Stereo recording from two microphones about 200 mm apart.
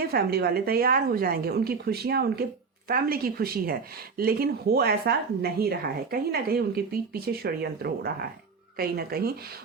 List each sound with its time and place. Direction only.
0.1 s speech: 50° right (ahead or behind)